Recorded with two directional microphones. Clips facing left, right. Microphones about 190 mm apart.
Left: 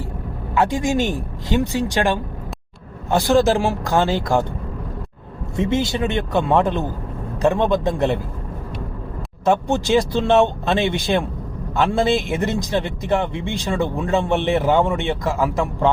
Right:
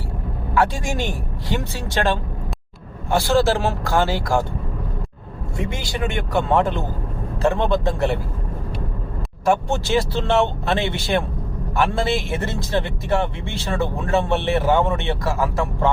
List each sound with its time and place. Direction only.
0.5 s speech: 20° left (ahead or behind)
5.5 s speech: 20° left (ahead or behind)
9.4 s speech: 20° left (ahead or behind)